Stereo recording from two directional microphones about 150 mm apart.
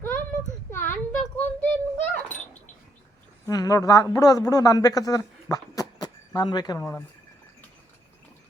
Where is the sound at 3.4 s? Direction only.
25° left (ahead or behind).